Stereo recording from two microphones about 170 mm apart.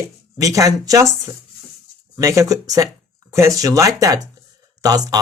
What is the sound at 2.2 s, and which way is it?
Speech, 15° right (ahead or behind).